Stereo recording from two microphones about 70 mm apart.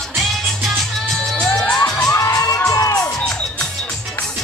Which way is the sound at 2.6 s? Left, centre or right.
Left.